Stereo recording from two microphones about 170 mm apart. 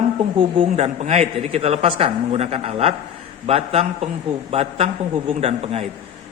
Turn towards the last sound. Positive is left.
turn(degrees=-40)  # may be behind; listen again after turning